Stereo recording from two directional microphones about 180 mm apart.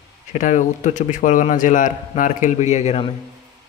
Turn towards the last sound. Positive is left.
turn(degrees=40)  # may be behind; listen again after turning